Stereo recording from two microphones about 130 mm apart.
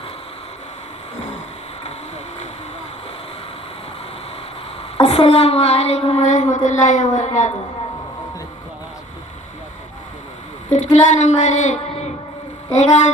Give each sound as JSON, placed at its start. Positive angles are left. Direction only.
{"t": 4.9, "sound": "a woman's voice", "side_deg": 50}
{"t": 10.7, "sound": "a woman's voice", "side_deg": 70}